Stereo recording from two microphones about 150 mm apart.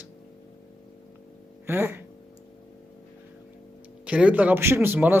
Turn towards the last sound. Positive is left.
turn(degrees=-15)  # may be behind; listen again after turning